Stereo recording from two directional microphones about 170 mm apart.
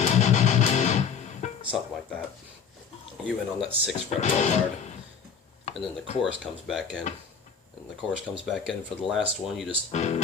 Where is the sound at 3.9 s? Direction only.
40° left (ahead or behind).